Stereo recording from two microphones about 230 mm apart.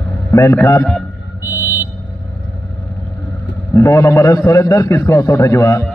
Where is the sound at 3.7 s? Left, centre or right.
Centre.